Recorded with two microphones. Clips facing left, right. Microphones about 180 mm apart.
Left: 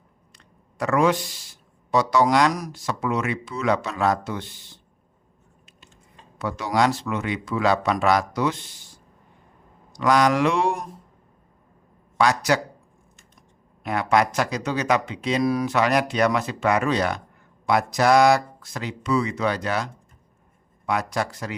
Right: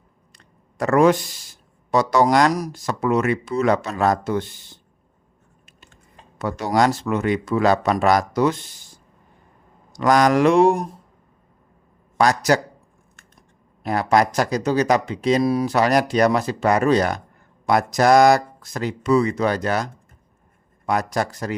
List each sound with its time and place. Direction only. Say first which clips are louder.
0.3 s speech: right 3 dB; 45° right (ahead or behind)
6.4 s speech: right 3 dB; 45° right (ahead or behind)
9.9 s speech: right 3 dB; 45° right (ahead or behind)
12.1 s speech: right 3 dB; 45° right (ahead or behind)
13.8 s speech: right 3 dB; 35° right (ahead or behind)